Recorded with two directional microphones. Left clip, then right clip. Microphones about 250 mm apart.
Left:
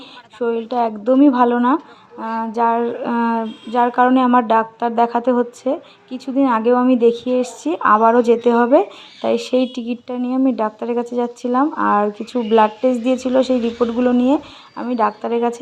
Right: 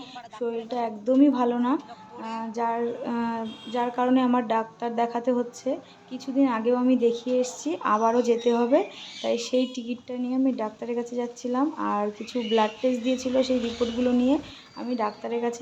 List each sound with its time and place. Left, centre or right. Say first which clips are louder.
0.3 s speech: left 10 dB; left